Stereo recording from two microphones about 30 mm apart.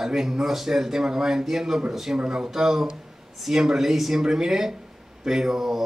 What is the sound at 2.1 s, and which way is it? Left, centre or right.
Speech, right.